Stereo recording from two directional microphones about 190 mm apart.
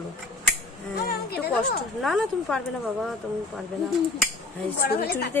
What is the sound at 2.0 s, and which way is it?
Speech, centre (ahead or behind).